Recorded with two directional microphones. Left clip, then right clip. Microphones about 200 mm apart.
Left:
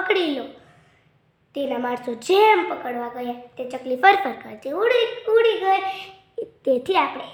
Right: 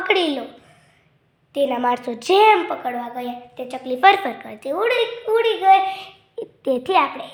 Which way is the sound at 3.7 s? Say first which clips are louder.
Right 2 dB; 15° right (ahead or behind).